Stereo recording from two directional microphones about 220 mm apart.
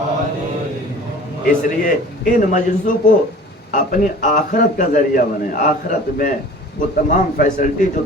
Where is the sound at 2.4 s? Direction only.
35° left (ahead or behind).